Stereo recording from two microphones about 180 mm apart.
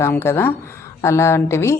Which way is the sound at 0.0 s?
15° left (ahead or behind).